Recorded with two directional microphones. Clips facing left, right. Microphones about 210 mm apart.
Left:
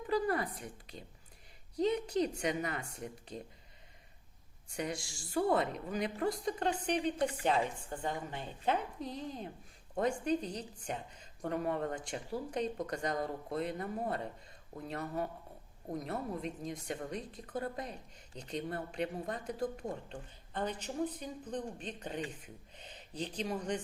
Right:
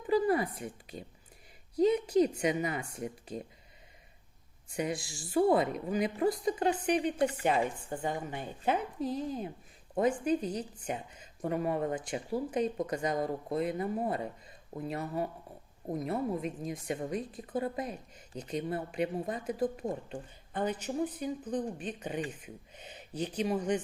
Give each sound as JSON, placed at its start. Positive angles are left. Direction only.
{"t": 0.1, "sound": "a sound", "side_deg": -10}
{"t": 1.8, "sound": "speech", "side_deg": -5}
{"t": 4.8, "sound": "a woman's voice", "side_deg": -5}